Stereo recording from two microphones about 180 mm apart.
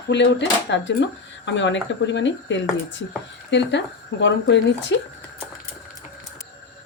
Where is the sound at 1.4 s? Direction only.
90° left.